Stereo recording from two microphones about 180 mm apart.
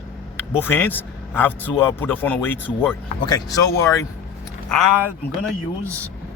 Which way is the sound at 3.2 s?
20° left (ahead or behind).